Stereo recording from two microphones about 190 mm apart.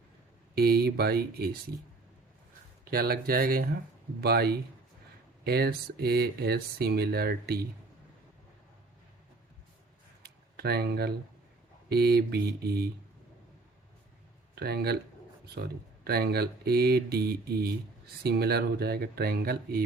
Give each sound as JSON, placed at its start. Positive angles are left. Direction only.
{"t": 0.5, "sound": "speech", "side_deg": -55}
{"t": 2.8, "sound": "speech", "side_deg": -50}
{"t": 10.2, "sound": "a sound", "side_deg": -55}
{"t": 11.9, "sound": "speech", "side_deg": -55}
{"t": 14.5, "sound": "speech", "side_deg": -55}